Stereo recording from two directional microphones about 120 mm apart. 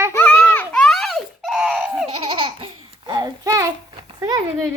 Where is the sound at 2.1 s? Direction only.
45° right (ahead or behind); by 3.7 s 30° right (ahead or behind).